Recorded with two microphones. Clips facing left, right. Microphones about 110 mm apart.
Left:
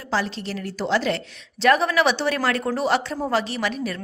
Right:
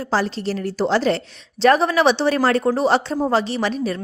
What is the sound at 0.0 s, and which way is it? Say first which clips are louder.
A woman's voice: right 4 dB; 35° right (ahead or behind).